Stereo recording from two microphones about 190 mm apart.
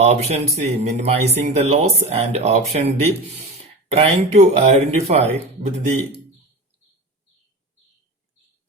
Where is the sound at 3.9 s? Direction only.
35° right (ahead or behind).